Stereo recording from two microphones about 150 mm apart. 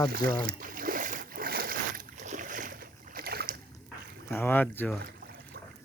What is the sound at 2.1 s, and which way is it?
Boat, 55° right (ahead or behind).